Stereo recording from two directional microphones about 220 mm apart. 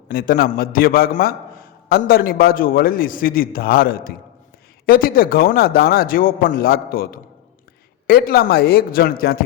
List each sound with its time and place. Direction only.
0.1 s a man's voice: 40° left (ahead or behind)